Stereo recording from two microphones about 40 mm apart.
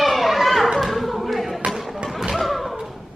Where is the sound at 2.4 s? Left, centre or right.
Centre.